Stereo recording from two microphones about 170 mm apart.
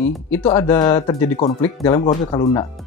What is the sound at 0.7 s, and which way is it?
Speech, 25° left (ahead or behind).